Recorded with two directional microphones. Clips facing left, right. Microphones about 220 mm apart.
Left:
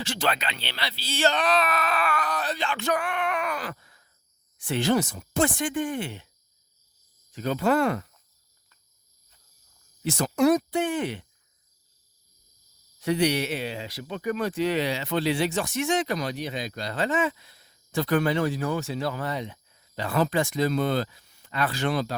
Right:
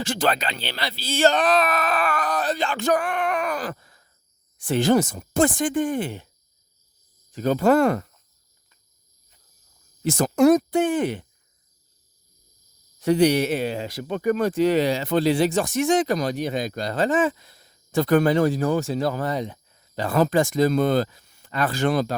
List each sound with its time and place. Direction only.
0.0 s speech: 50° right (ahead or behind)
4.5 s speech: 50° right (ahead or behind)
7.3 s speech: 45° right (ahead or behind)
10.0 s speech: 45° right (ahead or behind)
13.0 s speech: 50° right (ahead or behind)